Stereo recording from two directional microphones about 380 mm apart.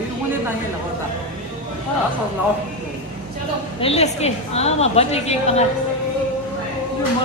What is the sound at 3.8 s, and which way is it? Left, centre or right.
A woman's voice, centre.